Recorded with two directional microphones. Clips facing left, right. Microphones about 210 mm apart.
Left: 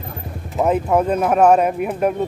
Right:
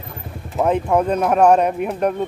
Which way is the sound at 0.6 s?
5° left (ahead or behind).